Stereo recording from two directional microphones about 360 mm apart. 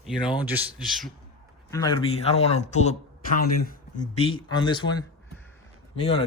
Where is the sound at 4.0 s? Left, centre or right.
Centre.